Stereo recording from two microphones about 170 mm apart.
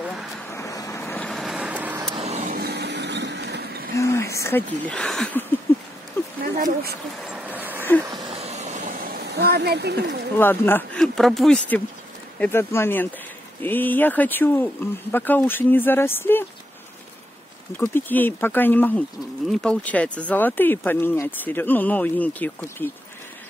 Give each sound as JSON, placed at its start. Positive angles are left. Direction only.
{"t": 0.5, "sound": "vehicle", "side_deg": 20}
{"t": 1.3, "sound": "vehicle", "side_deg": 0}
{"t": 2.1, "sound": "vehicle", "side_deg": -40}
{"t": 2.5, "sound": "a sound", "side_deg": -70}
{"t": 3.9, "sound": "a sound", "side_deg": 15}
{"t": 5.7, "sound": "patter", "side_deg": 10}
{"t": 6.4, "sound": "speech", "side_deg": -60}
{"t": 7.2, "sound": "vehicle", "side_deg": -10}
{"t": 8.0, "sound": "a sound", "side_deg": -25}
{"t": 8.4, "sound": "a sound", "side_deg": -40}
{"t": 10.3, "sound": "speech", "side_deg": 10}
{"t": 11.0, "sound": "speech", "side_deg": 0}
{"t": 17.7, "sound": "speech", "side_deg": 10}